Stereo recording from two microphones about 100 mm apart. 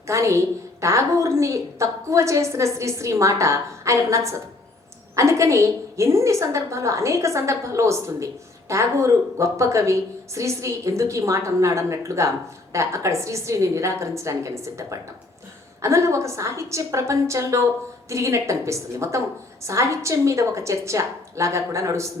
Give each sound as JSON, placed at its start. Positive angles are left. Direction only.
{"t": 0.1, "sound": "a woman's voice", "side_deg": -30}